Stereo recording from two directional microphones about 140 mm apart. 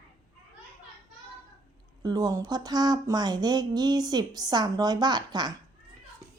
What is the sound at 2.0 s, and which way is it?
Speech, 25° right (ahead or behind).